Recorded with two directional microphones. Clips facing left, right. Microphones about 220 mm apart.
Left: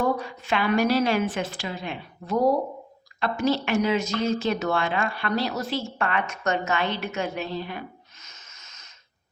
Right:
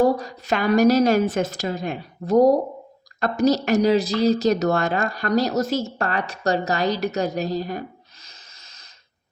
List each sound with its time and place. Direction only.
0.0 s speech: 35° right (ahead or behind)